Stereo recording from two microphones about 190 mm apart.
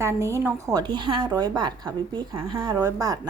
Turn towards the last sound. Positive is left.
turn(degrees=-15)  # may be behind; listen again after turning